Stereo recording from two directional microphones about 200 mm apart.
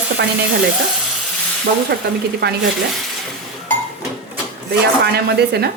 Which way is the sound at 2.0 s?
50° right (ahead or behind).